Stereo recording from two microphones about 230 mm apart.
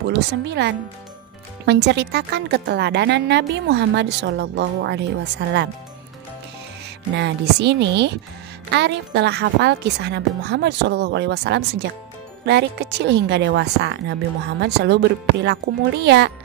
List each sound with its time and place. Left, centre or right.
0.1 s a woman's voice: right
7.2 s a woman's voice: right